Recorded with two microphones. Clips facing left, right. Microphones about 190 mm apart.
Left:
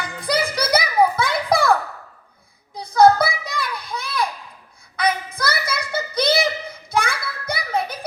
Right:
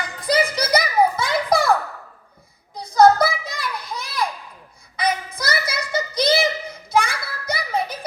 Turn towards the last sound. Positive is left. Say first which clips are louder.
# even
turn(degrees=55)  # may be behind; listen again after turning